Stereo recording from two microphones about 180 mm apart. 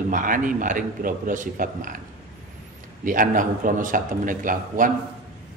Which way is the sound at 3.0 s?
50° right (ahead or behind).